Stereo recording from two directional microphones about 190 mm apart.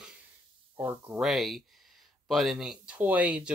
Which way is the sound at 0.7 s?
10° right (ahead or behind).